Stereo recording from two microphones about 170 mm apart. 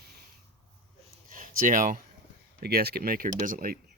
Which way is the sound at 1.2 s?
55° right (ahead or behind).